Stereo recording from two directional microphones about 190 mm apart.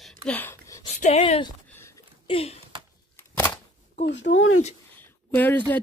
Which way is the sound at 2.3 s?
30° left (ahead or behind).